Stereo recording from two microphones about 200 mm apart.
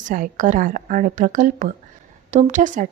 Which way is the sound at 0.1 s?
40° right (ahead or behind).